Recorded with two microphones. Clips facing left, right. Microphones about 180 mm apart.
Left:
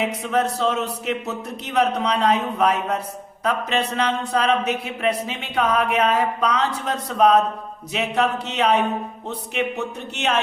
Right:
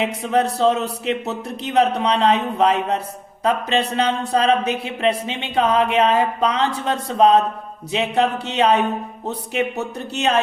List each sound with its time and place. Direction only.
0.1 s speech: 30° right (ahead or behind)